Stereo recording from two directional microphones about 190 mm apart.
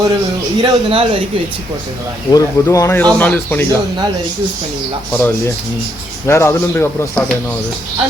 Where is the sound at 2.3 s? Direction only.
15° left (ahead or behind).